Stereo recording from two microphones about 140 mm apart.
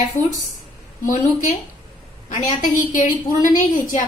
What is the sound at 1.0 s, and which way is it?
Speech, 70° left (ahead or behind).